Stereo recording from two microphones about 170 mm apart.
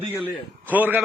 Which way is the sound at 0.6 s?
10° right (ahead or behind).